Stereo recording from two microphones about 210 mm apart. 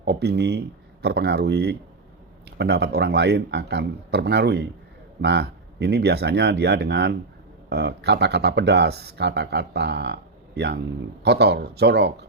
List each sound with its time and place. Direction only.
0.0 s speech: 50° right (ahead or behind)